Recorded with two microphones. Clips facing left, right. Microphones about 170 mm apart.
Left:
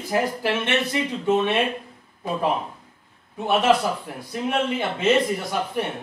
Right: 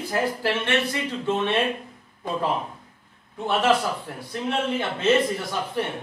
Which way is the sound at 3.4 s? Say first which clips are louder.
Left 2 dB; 15° left (ahead or behind).